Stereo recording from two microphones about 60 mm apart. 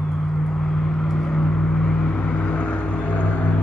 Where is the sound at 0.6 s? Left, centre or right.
Centre.